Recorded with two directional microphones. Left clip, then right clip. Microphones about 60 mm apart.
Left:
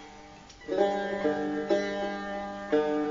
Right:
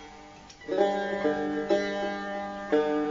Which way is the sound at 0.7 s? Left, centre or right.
Left.